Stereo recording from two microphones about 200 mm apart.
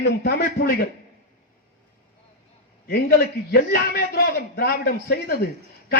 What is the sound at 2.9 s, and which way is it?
A man's voice, 50° left (ahead or behind).